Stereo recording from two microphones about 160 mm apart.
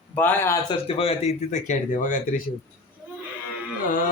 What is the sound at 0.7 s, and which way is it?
Speech, 35° left (ahead or behind).